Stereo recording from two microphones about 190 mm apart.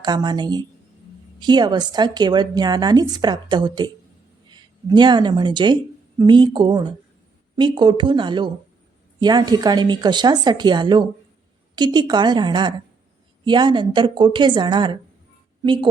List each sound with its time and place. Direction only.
0.0 s a woman's voice: 20° right (ahead or behind)